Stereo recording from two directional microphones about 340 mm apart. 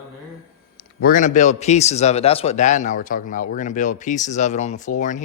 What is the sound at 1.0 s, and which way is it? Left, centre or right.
A man's voice, left.